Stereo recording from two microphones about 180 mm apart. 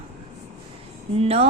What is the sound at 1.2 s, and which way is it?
Mantra, 35° right (ahead or behind).